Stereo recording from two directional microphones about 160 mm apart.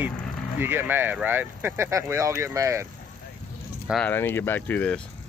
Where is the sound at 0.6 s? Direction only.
15° right (ahead or behind).